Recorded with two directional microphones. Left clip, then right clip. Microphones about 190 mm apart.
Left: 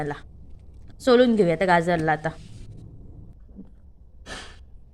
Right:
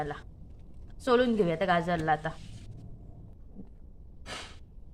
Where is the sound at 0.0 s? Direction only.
25° left (ahead or behind).